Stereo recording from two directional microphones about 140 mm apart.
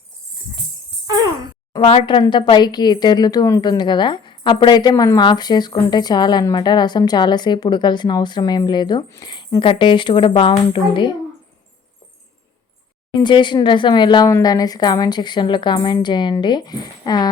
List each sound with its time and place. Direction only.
1.8 s a woman's voice: 45° left (ahead or behind)
13.2 s a woman's voice: 35° left (ahead or behind)